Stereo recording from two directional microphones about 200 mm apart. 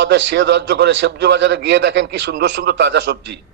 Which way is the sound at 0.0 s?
60° right (ahead or behind).